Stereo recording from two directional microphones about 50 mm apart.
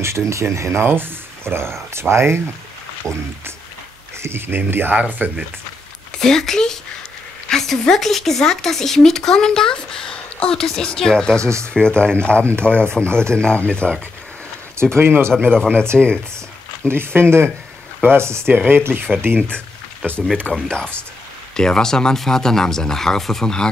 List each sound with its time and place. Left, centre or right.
0.0 s speech: right
0.8 s speech: right
3.0 s speech: centre
4.2 s speech: right
6.1 s speech: centre
15.0 s speech: right
15.5 s speech: centre
16.8 s speech: right
18.7 s speech: right
20.5 s speech: centre